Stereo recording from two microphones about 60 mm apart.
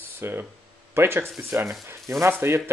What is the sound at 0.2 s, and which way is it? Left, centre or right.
Speech, right.